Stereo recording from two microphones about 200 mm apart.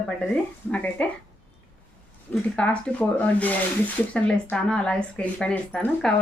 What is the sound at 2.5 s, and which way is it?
Speech, 5° left (ahead or behind).